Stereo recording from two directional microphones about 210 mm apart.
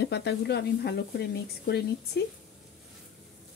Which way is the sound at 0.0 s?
55° left (ahead or behind).